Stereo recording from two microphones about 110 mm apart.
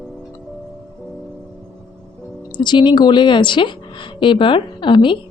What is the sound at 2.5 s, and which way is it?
A woman's voice, 45° left (ahead or behind).